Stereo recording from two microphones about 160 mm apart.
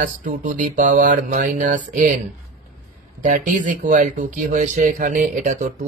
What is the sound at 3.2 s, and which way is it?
Speech, 50° right (ahead or behind).